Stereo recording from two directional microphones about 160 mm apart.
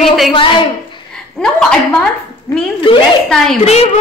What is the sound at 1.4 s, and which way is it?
Speech, 5° left (ahead or behind).